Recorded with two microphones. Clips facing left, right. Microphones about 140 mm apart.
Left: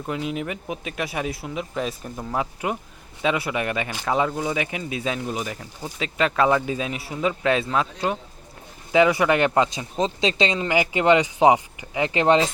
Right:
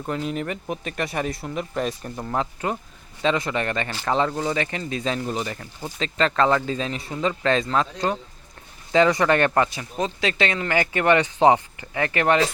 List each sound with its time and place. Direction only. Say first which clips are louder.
0.0 s speech: right 1 dB; 5° left (ahead or behind); by 12.5 s 20° left (ahead or behind)